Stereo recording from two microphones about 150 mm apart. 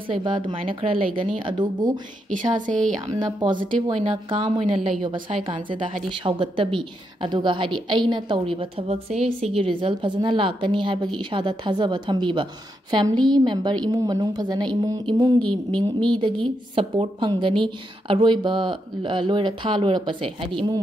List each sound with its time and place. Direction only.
0.1 s a woman's voice: 35° right (ahead or behind)
2.3 s speech: 60° right (ahead or behind)
3.2 s a woman's voice: 30° right (ahead or behind)